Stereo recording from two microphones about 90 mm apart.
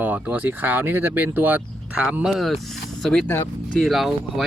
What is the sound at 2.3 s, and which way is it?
Speech, centre (ahead or behind).